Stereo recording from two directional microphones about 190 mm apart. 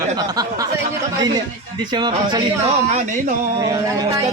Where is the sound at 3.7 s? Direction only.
20° right (ahead or behind).